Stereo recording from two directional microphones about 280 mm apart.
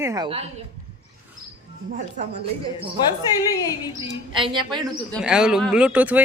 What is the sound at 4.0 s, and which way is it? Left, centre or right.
Speech, centre.